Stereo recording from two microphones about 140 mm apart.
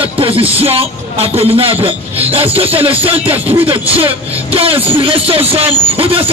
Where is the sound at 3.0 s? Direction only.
10° right (ahead or behind).